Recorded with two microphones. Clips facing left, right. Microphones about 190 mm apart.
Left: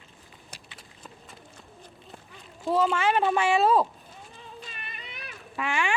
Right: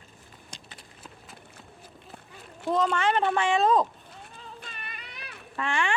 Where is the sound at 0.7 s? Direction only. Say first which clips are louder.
Even; centre (ahead or behind).